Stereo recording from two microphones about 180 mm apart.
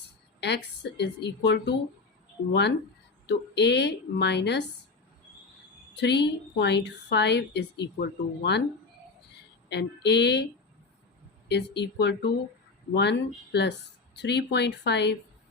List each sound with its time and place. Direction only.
0.3 s a woman's voice: 70° left (ahead or behind)
5.9 s a woman's voice: 70° left (ahead or behind)
9.6 s a woman's voice: 70° left (ahead or behind)